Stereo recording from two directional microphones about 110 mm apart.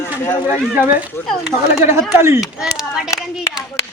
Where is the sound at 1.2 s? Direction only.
20° left (ahead or behind).